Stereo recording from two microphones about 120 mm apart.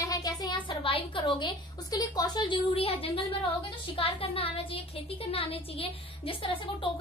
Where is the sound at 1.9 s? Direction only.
30° left (ahead or behind).